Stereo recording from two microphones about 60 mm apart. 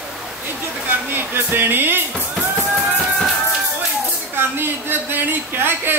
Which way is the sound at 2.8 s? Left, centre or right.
Centre.